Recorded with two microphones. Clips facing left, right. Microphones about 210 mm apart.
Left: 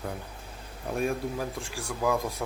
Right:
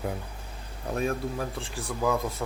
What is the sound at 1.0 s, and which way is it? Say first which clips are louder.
Speech: even; centre (ahead or behind).